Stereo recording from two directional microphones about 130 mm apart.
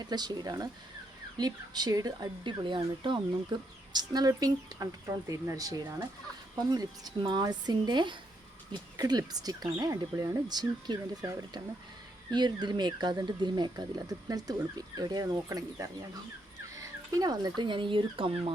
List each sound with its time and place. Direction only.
0.0 s speech: 35° right (ahead or behind)
16.7 s a sound: 25° right (ahead or behind)
17.6 s speech: 40° right (ahead or behind)